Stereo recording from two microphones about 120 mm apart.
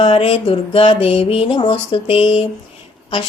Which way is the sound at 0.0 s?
50° left (ahead or behind).